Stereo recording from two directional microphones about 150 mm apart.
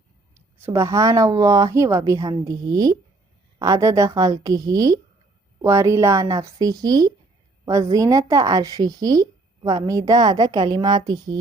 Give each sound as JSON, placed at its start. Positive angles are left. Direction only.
{"t": 0.3, "sound": "speech", "side_deg": -20}